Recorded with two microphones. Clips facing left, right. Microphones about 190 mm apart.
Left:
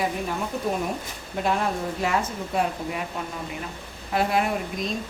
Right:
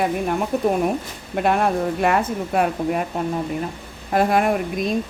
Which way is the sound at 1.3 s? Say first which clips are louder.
Right 6 dB; 60° right (ahead or behind).